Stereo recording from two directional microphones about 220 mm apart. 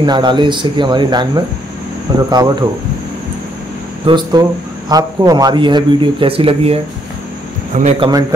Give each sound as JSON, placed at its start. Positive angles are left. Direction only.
{"t": 0.0, "sound": "speech", "side_deg": -20}
{"t": 4.0, "sound": "speech", "side_deg": -20}